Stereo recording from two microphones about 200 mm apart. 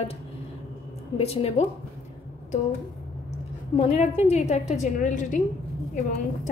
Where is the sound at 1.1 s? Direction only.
30° left (ahead or behind).